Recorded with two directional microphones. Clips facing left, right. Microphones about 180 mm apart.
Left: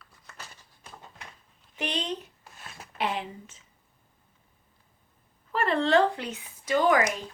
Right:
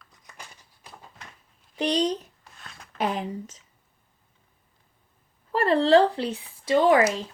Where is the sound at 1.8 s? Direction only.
40° right (ahead or behind).